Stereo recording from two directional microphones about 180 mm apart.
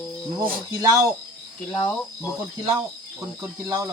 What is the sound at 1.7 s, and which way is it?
Speech, 15° left (ahead or behind).